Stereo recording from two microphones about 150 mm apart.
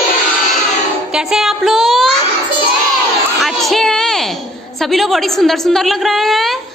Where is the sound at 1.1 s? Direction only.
5° right (ahead or behind).